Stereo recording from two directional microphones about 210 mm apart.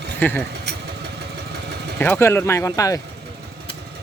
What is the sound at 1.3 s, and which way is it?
Vehicle, 50° right (ahead or behind).